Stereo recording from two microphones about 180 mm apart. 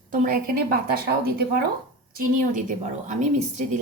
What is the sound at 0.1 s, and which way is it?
Speech, 50° right (ahead or behind).